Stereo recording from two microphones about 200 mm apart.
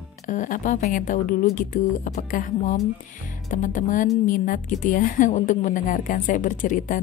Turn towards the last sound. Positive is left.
turn(degrees=40)  # may be behind; listen again after turning